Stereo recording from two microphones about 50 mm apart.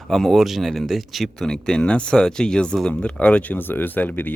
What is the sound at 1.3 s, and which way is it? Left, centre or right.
Speech, centre.